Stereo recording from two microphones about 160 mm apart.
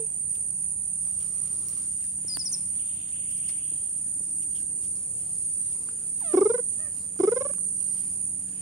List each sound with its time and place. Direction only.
2.2 s chirp: 5° right (ahead or behind)
6.3 s fowl: 20° right (ahead or behind)
7.2 s turkey: 20° right (ahead or behind)